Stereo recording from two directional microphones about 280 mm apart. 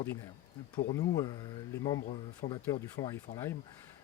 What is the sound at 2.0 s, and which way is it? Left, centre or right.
Speech, left.